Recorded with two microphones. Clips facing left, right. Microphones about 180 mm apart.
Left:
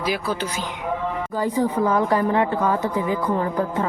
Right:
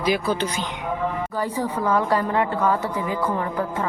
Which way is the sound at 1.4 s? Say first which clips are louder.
Left 6 dB; 15° left (ahead or behind).